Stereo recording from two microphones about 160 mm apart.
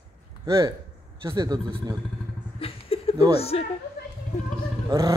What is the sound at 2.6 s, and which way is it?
Chuckle, 35° left (ahead or behind).